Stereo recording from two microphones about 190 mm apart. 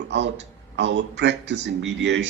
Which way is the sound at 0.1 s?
70° right (ahead or behind).